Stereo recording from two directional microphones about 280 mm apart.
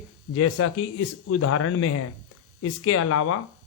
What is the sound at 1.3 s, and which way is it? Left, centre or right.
A man's voice, left.